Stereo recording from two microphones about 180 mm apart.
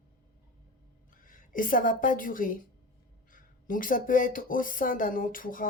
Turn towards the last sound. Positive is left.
turn(degrees=50)  # may be behind; listen again after turning